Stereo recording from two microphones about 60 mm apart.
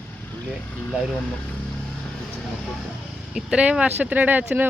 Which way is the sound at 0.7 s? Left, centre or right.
Left.